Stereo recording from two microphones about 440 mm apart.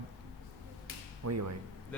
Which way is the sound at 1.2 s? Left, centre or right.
Right.